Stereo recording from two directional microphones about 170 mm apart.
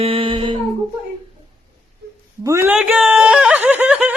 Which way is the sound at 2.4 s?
15° right (ahead or behind).